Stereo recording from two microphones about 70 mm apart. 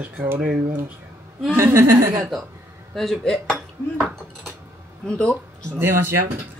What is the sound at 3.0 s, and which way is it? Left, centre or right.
Speech, centre.